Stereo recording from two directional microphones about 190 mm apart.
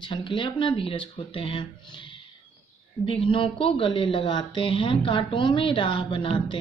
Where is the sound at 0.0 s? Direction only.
25° left (ahead or behind).